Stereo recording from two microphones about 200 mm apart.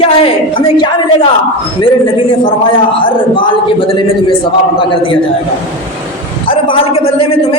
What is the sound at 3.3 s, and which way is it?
Speech, 25° left (ahead or behind).